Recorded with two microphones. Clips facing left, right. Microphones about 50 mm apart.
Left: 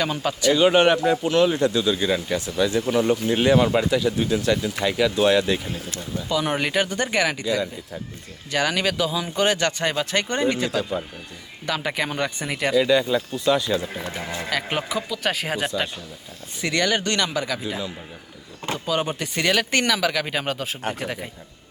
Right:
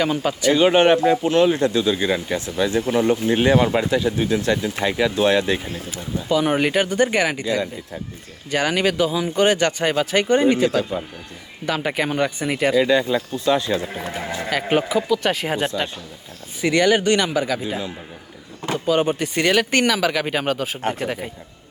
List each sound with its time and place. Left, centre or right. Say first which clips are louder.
0.0 s speech: right 3 dB; centre
0.6 s speech: right 2 dB; right
5.9 s speech: right 5 dB; centre
7.4 s speech: right 1 dB; right
8.4 s speech: right 3 dB; centre
12.9 s speech: right 1 dB; right
14.5 s speech: right 6 dB; centre
16.6 s speech: right 6 dB; centre
18.9 s speech: right 6 dB; centre